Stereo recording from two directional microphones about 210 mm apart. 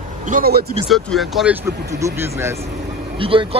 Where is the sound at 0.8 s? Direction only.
Centre (ahead or behind).